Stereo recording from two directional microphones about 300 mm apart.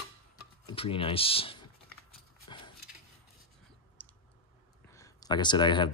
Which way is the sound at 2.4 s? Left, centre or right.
Centre.